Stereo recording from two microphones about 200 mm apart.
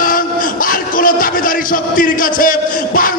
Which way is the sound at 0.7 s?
45° left (ahead or behind).